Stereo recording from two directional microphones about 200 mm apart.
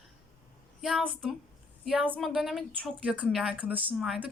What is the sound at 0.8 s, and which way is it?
A woman's voice, centre (ahead or behind).